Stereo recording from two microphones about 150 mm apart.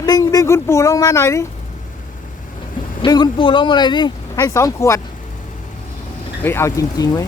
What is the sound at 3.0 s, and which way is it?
Speech, 30° left (ahead or behind).